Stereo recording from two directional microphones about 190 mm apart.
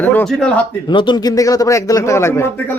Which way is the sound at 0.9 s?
25° left (ahead or behind).